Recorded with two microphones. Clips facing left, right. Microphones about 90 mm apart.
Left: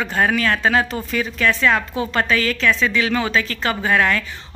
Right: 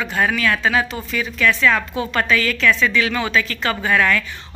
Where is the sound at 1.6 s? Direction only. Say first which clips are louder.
Even; 25° left (ahead or behind).